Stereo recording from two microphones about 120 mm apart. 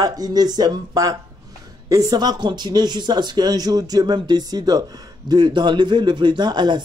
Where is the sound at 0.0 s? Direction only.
30° right (ahead or behind).